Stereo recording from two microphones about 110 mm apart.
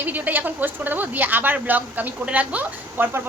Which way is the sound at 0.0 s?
15° right (ahead or behind).